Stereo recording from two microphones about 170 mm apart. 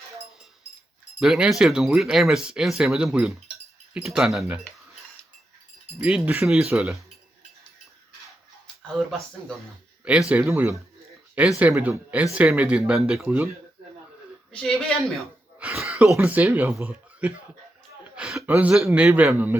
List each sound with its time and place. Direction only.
1.2 s speech: centre (ahead or behind)
6.0 s speech: 5° right (ahead or behind)
8.6 s speech: centre (ahead or behind)
14.5 s speech: 5° left (ahead or behind)
15.5 s a sound: 5° right (ahead or behind)
16.1 s speech: 10° right (ahead or behind)
18.2 s a sound: 5° right (ahead or behind)
18.5 s speech: 5° right (ahead or behind)